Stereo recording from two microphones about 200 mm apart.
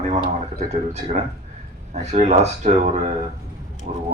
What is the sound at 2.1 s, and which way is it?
Speech, 35° right (ahead or behind).